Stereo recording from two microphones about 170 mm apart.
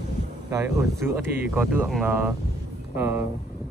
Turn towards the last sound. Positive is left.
turn(degrees=-15)  # may be behind; listen again after turning